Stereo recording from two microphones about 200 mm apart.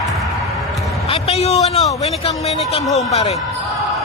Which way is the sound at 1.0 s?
30° left (ahead or behind).